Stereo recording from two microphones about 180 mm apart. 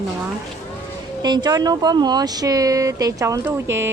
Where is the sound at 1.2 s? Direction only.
25° right (ahead or behind).